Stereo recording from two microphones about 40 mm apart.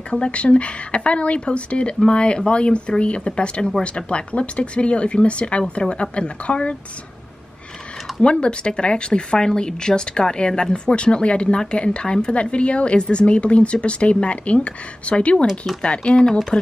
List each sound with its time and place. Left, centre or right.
0.1 s speech: left
8.2 s speech: left